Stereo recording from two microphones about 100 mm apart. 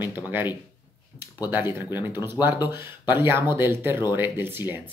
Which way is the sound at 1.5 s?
20° right (ahead or behind).